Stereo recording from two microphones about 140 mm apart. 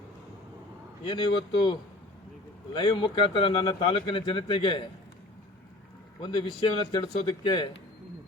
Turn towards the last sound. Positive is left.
turn(degrees=35)  # may be behind; listen again after turning